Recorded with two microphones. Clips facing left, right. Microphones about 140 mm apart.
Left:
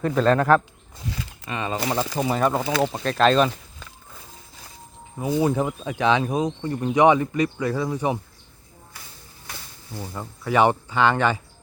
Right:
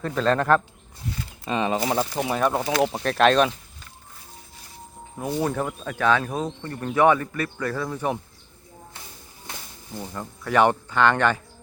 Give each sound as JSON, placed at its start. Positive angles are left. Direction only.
{"t": 0.0, "sound": "speech", "side_deg": 5}
{"t": 1.5, "sound": "speech", "side_deg": -20}
{"t": 1.7, "sound": "speech", "side_deg": -5}
{"t": 5.1, "sound": "speech", "side_deg": 0}
{"t": 9.5, "sound": "snake", "side_deg": -25}
{"t": 10.2, "sound": "speech", "side_deg": 10}